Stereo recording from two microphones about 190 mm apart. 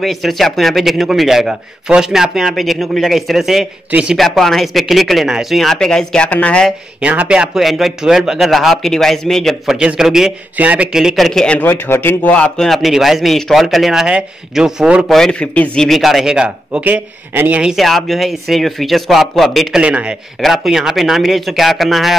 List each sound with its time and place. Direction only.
0.0 s a man's voice: centre (ahead or behind)
7.0 s a man's voice: 5° right (ahead or behind)